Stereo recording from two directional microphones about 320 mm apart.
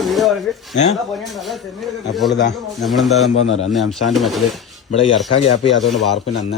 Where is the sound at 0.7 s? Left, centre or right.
Left.